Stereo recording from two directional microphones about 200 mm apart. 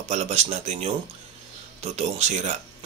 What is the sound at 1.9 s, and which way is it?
Speech, 35° right (ahead or behind).